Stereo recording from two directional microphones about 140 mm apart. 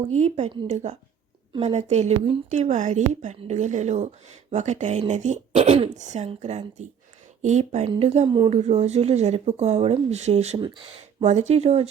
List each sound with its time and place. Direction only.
0.1 s a woman's voice: 50° right (ahead or behind)